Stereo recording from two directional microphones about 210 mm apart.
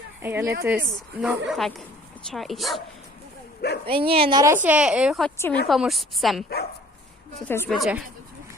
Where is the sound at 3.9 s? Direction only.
25° right (ahead or behind).